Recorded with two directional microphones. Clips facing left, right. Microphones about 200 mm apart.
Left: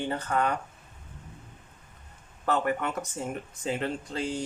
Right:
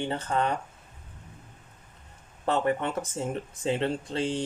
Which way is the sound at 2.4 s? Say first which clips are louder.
Right 1 dB; 30° right (ahead or behind).